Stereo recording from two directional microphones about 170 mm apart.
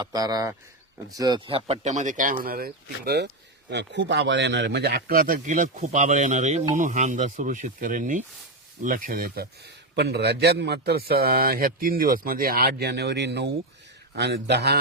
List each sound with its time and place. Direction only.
0.0 s speech: 20° right (ahead or behind); by 3.2 s 65° right (ahead or behind)
3.7 s a man's voice: 90° right